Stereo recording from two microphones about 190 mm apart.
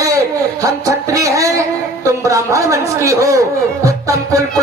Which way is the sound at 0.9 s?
15° right (ahead or behind).